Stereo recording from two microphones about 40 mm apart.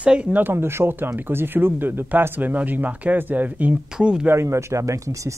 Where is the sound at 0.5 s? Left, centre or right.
Right.